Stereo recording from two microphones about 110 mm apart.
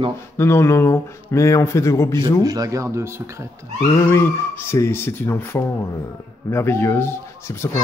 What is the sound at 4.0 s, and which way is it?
A child's voice, 25° left (ahead or behind).